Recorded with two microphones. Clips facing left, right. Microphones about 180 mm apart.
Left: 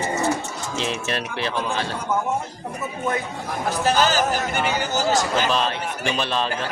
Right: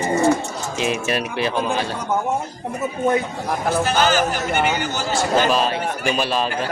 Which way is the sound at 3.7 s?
40° left (ahead or behind).